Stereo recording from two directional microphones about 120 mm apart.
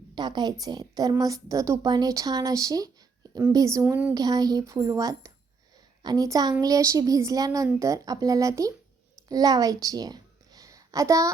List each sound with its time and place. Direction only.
0.2 s a woman's voice: 35° right (ahead or behind)